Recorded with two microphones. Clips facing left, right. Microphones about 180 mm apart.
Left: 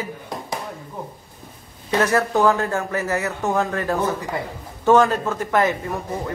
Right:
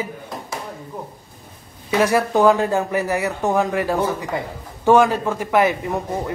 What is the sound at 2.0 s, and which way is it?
A man's voice, 10° right (ahead or behind).